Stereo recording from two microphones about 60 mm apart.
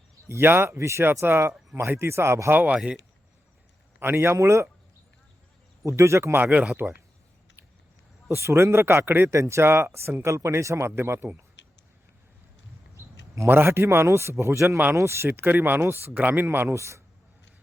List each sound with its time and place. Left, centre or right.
0.3 s speech: right
0.8 s a man's voice: right
2.7 s speech: centre
4.0 s a man's voice: right
6.0 s a man's voice: right
8.3 s a man's voice: right
9.3 s a man's voice: right
10.2 s a man's voice: right
13.4 s a man's voice: right
16.7 s speech: right